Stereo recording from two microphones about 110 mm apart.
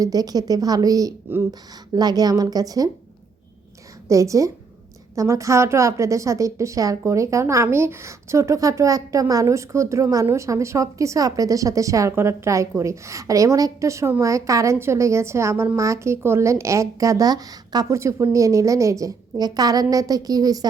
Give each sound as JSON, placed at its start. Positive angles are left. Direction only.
{"t": 0.0, "sound": "a woman's voice", "side_deg": -35}
{"t": 4.1, "sound": "a woman's voice", "side_deg": -30}